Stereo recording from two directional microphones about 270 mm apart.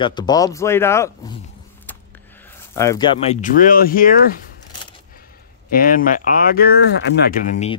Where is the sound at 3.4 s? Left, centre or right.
Left.